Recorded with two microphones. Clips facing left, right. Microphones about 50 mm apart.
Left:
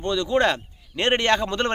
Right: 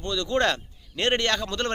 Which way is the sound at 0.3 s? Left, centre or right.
Centre.